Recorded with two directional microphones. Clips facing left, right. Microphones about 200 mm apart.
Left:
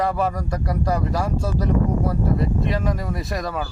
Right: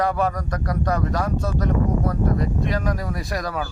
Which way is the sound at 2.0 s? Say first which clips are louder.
Even; 5° left (ahead or behind).